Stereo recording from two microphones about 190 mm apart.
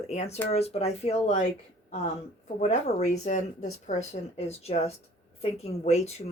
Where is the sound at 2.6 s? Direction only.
35° left (ahead or behind).